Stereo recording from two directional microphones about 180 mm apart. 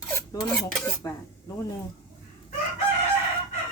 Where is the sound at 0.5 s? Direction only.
Centre (ahead or behind).